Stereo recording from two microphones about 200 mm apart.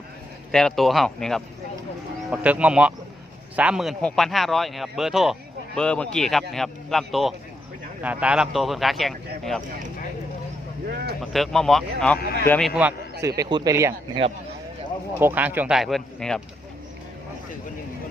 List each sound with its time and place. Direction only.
0.5 s speech: centre (ahead or behind)
11.2 s speech: centre (ahead or behind)
13.2 s speech: 15° right (ahead or behind)
15.2 s speech: 10° right (ahead or behind)